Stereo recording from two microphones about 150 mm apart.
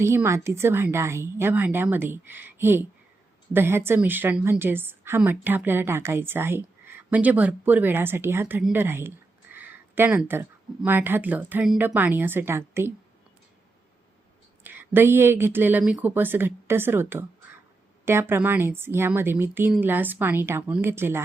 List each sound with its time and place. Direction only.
0.0 s a woman's voice: 15° right (ahead or behind)
8.7 s a sound: 15° right (ahead or behind)
10.8 s a woman's voice: 15° right (ahead or behind)
14.6 s a woman's voice: 15° right (ahead or behind)